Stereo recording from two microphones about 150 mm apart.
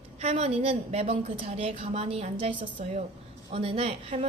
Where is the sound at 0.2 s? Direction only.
45° right (ahead or behind).